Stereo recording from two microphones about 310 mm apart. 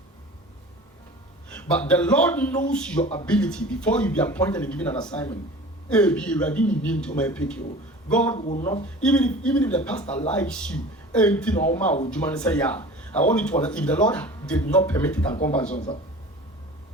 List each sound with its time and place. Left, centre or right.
1.5 s a sound: centre
1.9 s speech: centre
8.4 s speech: left
9.0 s speech: centre
15.3 s speech: left